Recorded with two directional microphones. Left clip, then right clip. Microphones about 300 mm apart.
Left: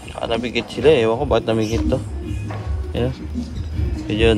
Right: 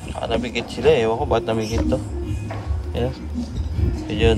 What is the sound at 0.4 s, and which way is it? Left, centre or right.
Speech, right.